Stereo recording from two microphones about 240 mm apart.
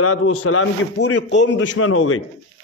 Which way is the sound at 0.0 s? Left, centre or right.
Left.